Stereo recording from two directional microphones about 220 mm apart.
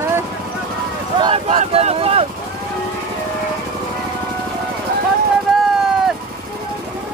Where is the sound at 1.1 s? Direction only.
20° right (ahead or behind).